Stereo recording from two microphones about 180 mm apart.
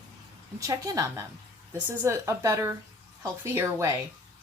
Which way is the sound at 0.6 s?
20° right (ahead or behind).